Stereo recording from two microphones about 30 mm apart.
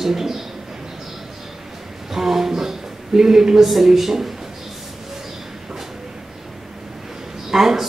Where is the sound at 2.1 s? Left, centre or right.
Centre.